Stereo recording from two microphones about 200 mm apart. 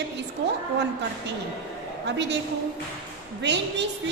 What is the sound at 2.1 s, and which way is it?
Speech, 60° right (ahead or behind).